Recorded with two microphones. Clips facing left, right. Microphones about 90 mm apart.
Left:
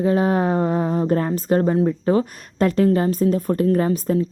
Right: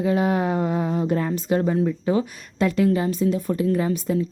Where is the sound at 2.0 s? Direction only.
40° left (ahead or behind).